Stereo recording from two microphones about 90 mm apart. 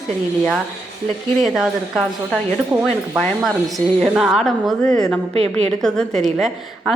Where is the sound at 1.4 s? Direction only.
Centre (ahead or behind).